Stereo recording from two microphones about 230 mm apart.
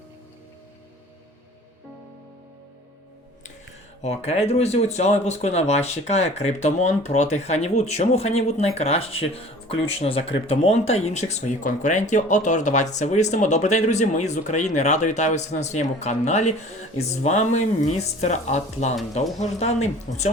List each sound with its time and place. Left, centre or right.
4.0 s speech: left